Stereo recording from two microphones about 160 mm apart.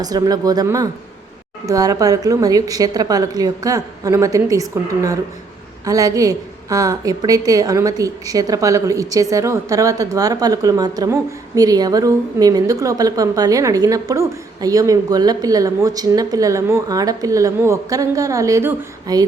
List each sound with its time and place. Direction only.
0.0 s a woman's voice: 25° right (ahead or behind)
5.8 s a woman's voice: 20° right (ahead or behind)